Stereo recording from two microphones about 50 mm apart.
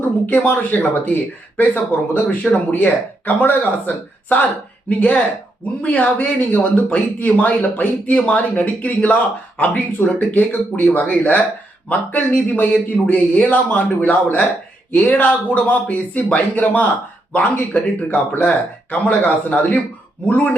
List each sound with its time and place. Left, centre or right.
0.0 s speech: left